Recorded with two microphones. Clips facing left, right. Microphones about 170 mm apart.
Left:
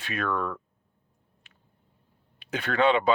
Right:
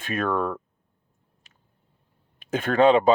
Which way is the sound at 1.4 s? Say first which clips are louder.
Even; 40° right (ahead or behind).